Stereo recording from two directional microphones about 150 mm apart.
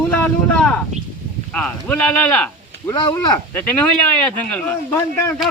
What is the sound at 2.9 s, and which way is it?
Speech, 30° left (ahead or behind).